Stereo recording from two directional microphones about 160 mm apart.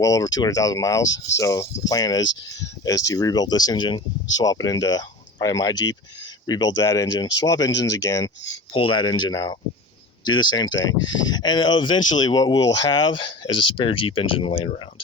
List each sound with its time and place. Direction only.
0.0 s speech: 20° left (ahead or behind)